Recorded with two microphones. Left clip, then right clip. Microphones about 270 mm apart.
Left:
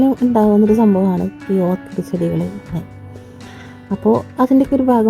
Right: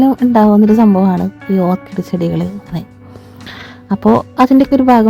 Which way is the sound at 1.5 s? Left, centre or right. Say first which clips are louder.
Right 3 dB; right.